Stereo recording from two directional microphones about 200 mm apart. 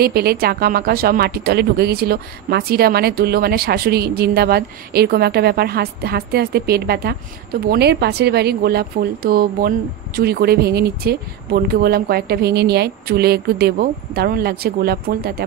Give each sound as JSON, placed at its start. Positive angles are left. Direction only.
{"t": 0.0, "sound": "a woman's voice", "side_deg": -50}